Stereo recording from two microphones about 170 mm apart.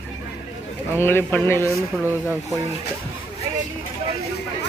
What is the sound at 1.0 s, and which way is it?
Speech, 10° left (ahead or behind).